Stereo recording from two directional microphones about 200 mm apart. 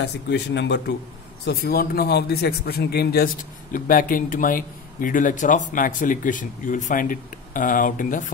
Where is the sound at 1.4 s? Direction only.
50° left (ahead or behind).